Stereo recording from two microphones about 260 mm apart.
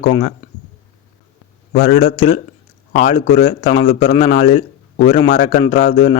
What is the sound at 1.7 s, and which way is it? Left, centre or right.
Speech, left.